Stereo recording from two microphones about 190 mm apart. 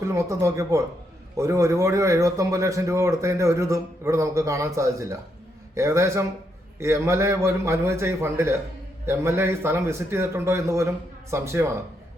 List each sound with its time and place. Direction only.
0.0 s speech: 15° right (ahead or behind)